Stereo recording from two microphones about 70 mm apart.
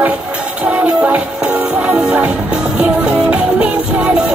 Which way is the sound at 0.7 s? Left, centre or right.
Centre.